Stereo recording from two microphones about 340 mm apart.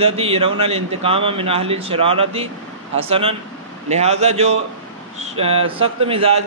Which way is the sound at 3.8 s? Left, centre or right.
Centre.